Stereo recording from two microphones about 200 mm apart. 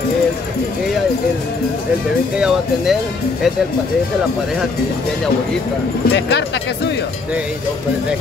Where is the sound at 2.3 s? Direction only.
5° right (ahead or behind).